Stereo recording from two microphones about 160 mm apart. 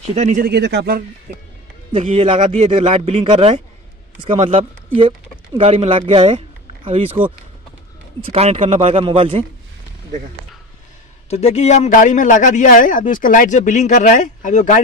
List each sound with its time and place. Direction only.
0.0 s speech: 45° right (ahead or behind)
0.4 s speech: 90° right
2.1 s speech: 35° right (ahead or behind)
8.3 s speech: 40° right (ahead or behind)
11.2 s a man's voice: 40° left (ahead or behind)